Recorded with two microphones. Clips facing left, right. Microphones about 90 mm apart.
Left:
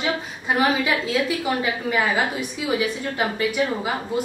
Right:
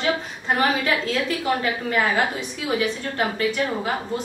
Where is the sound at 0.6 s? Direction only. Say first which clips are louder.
Left 1 dB; 5° left (ahead or behind).